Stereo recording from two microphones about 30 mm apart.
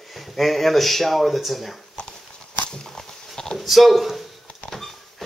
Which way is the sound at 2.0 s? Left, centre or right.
Left.